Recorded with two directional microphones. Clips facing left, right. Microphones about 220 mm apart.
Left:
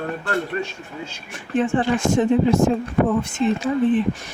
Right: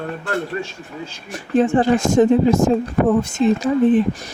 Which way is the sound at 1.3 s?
40° right (ahead or behind).